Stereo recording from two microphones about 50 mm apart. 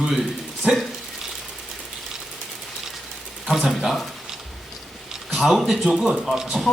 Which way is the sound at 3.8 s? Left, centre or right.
Centre.